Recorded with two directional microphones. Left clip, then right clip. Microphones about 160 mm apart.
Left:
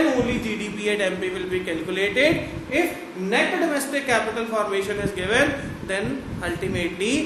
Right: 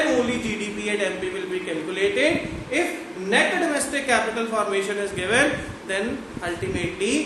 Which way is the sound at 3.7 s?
15° left (ahead or behind).